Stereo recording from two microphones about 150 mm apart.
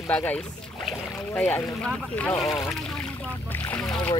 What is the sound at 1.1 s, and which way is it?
Speech, 15° left (ahead or behind).